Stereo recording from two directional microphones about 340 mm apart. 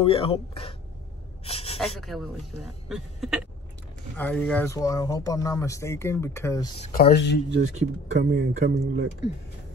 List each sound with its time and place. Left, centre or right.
0.0 s speech: centre
1.4 s a sound: centre
2.0 s speech: centre
6.9 s speech: left
7.6 s speech: centre
8.3 s speech: right